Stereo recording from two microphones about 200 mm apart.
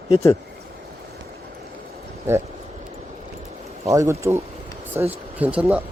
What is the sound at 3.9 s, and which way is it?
Speech, 15° right (ahead or behind).